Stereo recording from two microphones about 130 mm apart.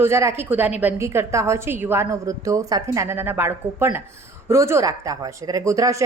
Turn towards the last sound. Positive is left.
turn(degrees=-25)  # may be behind; listen again after turning